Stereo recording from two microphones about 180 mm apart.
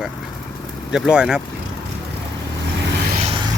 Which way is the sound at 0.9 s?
5° right (ahead or behind).